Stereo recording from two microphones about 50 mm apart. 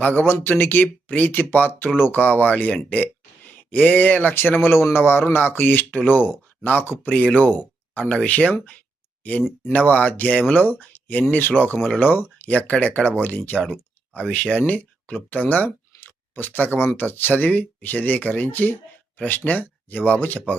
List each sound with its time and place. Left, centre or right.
0.0 s speech: left
4.7 s speech: left
7.1 s speech: left
9.7 s speech: left
14.7 s speech: left